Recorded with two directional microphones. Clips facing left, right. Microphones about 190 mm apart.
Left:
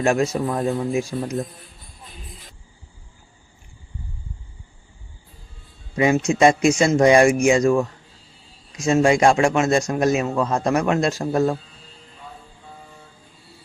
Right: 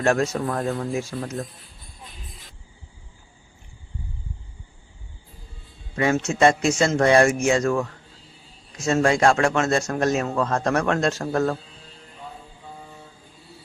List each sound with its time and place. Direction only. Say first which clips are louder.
0.0 s speech: left 2 dB; 10° left (ahead or behind)
6.0 s speech: left 3 dB; 15° left (ahead or behind)